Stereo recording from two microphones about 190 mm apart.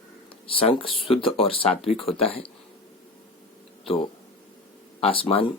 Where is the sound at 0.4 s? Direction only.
30° left (ahead or behind).